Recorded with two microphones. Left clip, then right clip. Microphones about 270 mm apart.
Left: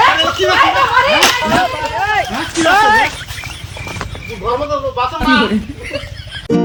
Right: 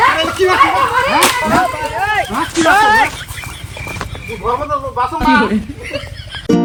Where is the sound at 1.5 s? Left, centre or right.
Centre.